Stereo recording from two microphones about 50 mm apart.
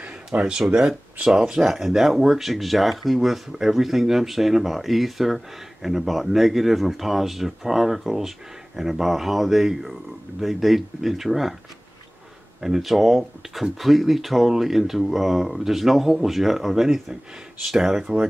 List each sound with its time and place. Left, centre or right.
0.4 s speech: centre
12.5 s speech: centre